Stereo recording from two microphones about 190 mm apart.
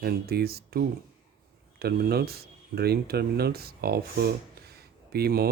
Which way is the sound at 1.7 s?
55° right (ahead or behind).